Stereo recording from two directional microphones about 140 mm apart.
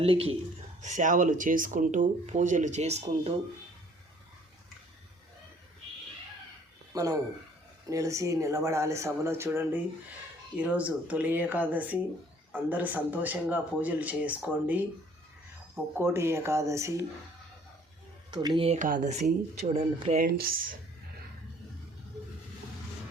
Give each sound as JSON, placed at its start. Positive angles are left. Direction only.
{"t": 0.0, "sound": "speech", "side_deg": -45}
{"t": 0.8, "sound": "speech", "side_deg": -60}
{"t": 6.9, "sound": "speech", "side_deg": -25}
{"t": 16.0, "sound": "speech", "side_deg": -20}
{"t": 18.3, "sound": "speech", "side_deg": -35}
{"t": 18.8, "sound": "speech", "side_deg": -65}
{"t": 20.1, "sound": "speech", "side_deg": -90}